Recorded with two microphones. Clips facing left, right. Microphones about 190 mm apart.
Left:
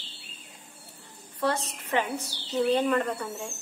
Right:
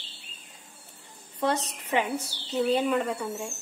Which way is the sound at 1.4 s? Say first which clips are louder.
Right 1 dB; 15° right (ahead or behind).